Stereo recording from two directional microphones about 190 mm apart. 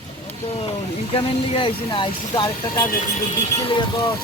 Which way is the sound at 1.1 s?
25° left (ahead or behind).